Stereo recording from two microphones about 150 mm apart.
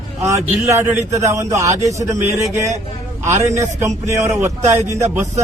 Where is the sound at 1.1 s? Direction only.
20° right (ahead or behind).